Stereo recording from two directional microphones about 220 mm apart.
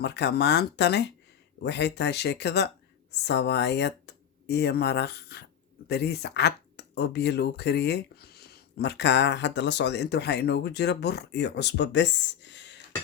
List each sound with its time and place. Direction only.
0.0 s speech: 50° left (ahead or behind)